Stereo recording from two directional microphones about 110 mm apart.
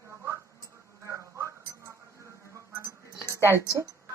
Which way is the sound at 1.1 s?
25° right (ahead or behind).